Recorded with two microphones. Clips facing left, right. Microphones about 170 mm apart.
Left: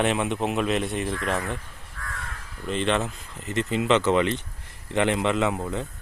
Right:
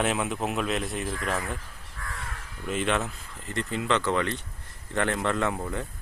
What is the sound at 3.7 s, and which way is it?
A man's voice, 20° left (ahead or behind).